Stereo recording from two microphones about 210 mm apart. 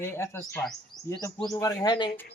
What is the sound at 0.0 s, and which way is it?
Speech, 15° left (ahead or behind).